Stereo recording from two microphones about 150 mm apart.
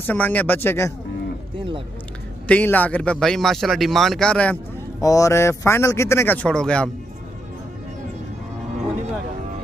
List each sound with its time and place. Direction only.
0.0 s speech: 10° left (ahead or behind)
2.4 s speech: 10° left (ahead or behind)
5.0 s speech: 20° left (ahead or behind)